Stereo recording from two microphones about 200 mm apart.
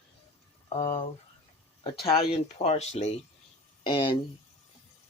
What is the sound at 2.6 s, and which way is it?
Speech, 35° left (ahead or behind).